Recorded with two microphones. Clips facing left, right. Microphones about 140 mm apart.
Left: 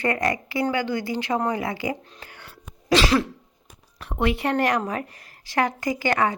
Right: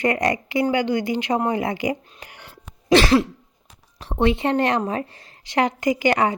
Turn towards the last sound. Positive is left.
turn(degrees=-20)  # may be behind; listen again after turning